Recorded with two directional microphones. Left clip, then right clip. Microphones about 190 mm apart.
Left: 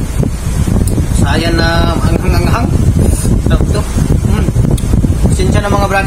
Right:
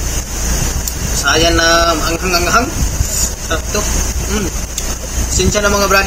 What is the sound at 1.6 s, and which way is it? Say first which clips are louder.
Speech: right 2 dB; 20° left (ahead or behind).